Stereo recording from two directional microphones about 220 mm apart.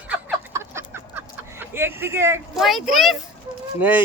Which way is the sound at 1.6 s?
10° right (ahead or behind).